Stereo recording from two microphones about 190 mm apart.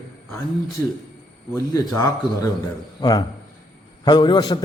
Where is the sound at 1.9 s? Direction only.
20° left (ahead or behind).